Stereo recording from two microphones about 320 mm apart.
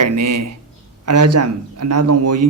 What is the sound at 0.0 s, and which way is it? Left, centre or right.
A man's voice, right.